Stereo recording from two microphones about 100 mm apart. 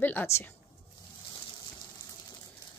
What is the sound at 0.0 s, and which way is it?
Speech, 20° left (ahead or behind).